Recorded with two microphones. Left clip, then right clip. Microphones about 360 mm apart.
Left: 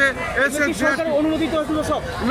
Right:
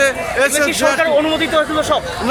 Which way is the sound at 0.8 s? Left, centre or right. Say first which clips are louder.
Right 6 dB; right.